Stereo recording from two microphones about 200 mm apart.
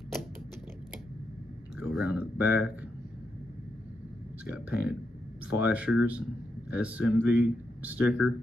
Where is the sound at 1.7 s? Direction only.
5° right (ahead or behind).